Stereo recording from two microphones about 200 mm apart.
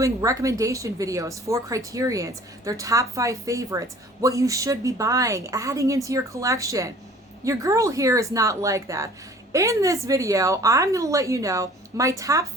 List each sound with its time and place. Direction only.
0.0 s speech: 15° right (ahead or behind)